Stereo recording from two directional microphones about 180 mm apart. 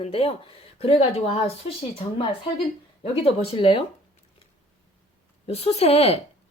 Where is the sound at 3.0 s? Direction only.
30° left (ahead or behind).